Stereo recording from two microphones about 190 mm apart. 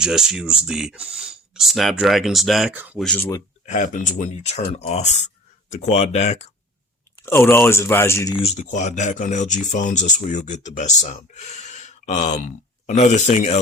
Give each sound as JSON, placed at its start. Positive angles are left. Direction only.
{"t": 0.0, "sound": "speech", "side_deg": 0}
{"t": 3.0, "sound": "speech", "side_deg": 5}
{"t": 3.7, "sound": "speech", "side_deg": 40}
{"t": 7.2, "sound": "speech", "side_deg": 15}
{"t": 8.4, "sound": "speech", "side_deg": 30}